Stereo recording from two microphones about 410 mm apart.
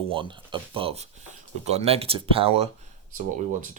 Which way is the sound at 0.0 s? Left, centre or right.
Centre.